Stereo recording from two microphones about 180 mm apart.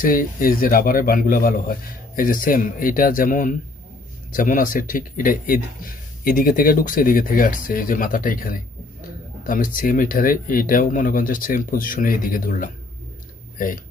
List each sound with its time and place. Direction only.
0.0 s speech: 50° left (ahead or behind)
9.8 s speech: 50° left (ahead or behind)